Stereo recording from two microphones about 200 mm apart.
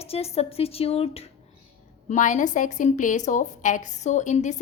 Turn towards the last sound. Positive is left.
turn(degrees=35)  # may be behind; listen again after turning